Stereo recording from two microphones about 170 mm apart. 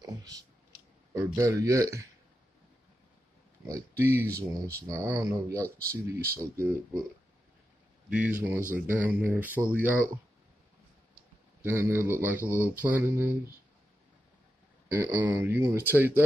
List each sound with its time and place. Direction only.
0.0 s a sound: 20° right (ahead or behind)
1.1 s speech: 15° right (ahead or behind)
3.6 s speech: 15° right (ahead or behind)
8.1 s speech: 5° right (ahead or behind)
11.6 s speech: 15° right (ahead or behind)
14.9 s speech: 15° right (ahead or behind)